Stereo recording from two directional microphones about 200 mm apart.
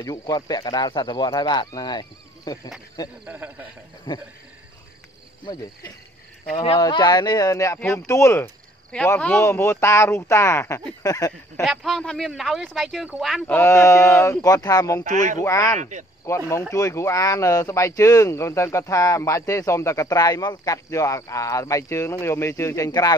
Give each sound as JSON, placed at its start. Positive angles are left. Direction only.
{"t": 0.0, "sound": "speech", "side_deg": 20}
{"t": 3.3, "sound": "speech", "side_deg": -10}
{"t": 6.5, "sound": "speech", "side_deg": 25}
{"t": 11.6, "sound": "speech", "side_deg": 0}
{"t": 13.6, "sound": "speech", "side_deg": 15}
{"t": 15.0, "sound": "speech", "side_deg": -40}
{"t": 15.3, "sound": "speech", "side_deg": 15}
{"t": 15.8, "sound": "speech", "side_deg": -40}
{"t": 16.3, "sound": "speech", "side_deg": 15}